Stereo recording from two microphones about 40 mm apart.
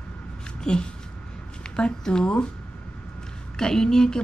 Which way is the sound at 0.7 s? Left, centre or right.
Centre.